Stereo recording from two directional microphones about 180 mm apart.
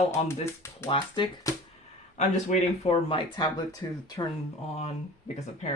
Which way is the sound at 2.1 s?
40° left (ahead or behind).